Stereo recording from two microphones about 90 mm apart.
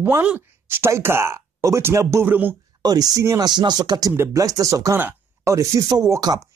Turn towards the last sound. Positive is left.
turn(degrees=-50)  # may be behind; listen again after turning